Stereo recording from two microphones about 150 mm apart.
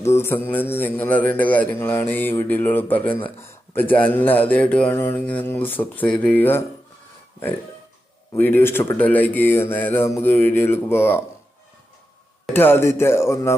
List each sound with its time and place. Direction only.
0.0 s speech: 20° left (ahead or behind)
8.4 s speech: 15° left (ahead or behind)
12.5 s speech: 15° left (ahead or behind)